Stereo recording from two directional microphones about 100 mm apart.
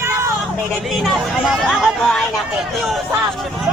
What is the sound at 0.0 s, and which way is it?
Vehicle, 25° right (ahead or behind).